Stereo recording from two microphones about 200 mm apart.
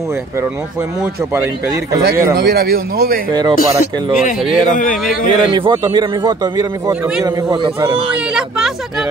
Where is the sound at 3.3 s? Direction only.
20° right (ahead or behind).